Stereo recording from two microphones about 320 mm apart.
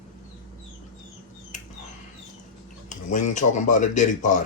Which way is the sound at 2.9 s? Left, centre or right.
Left.